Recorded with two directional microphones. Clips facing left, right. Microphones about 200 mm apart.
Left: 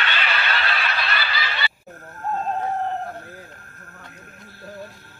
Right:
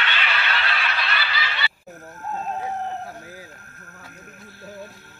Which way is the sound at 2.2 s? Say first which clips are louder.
Left 4 dB; 45° left (ahead or behind).